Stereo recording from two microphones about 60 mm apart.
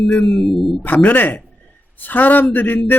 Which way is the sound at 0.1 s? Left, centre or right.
Centre.